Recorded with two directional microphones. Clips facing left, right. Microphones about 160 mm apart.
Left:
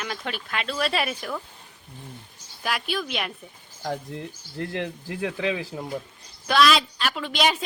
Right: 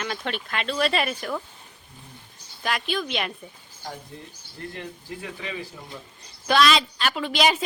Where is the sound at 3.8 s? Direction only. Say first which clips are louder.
Left 7 dB; 75° left (ahead or behind).